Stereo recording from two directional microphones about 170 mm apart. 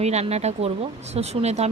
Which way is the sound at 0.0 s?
40° right (ahead or behind).